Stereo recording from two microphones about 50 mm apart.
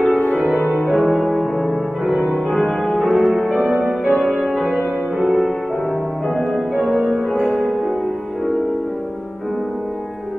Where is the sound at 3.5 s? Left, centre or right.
Right.